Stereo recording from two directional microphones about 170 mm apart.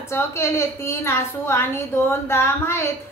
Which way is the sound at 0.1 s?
15° left (ahead or behind).